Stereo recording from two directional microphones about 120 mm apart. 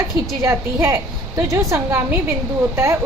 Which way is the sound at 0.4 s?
25° right (ahead or behind).